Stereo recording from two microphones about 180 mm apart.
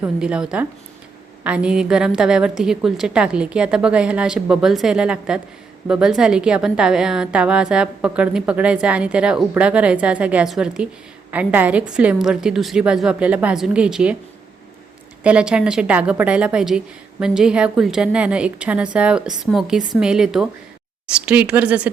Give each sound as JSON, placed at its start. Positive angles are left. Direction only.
{"t": 0.0, "sound": "a woman's voice", "side_deg": -5}
{"t": 15.2, "sound": "a woman's voice", "side_deg": -5}